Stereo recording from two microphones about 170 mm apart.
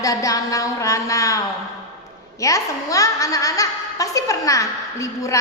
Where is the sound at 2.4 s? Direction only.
20° left (ahead or behind).